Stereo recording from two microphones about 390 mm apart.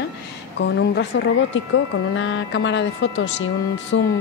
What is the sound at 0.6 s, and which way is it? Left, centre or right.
Speech, left.